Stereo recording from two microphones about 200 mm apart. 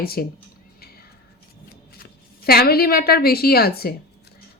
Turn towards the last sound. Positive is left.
turn(degrees=50)  # may be behind; listen again after turning